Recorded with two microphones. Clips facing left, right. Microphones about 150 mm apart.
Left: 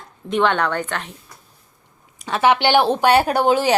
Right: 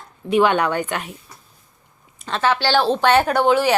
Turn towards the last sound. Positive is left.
turn(degrees=15)  # may be behind; listen again after turning